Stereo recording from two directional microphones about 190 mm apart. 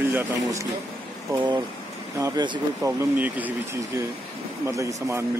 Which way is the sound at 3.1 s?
10° right (ahead or behind).